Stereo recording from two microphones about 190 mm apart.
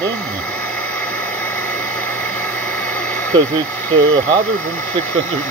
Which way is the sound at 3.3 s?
25° right (ahead or behind).